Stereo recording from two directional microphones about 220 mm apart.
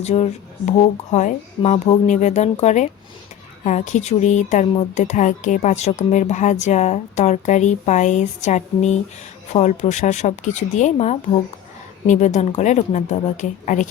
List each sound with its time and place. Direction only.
0.0 s speech: 30° left (ahead or behind)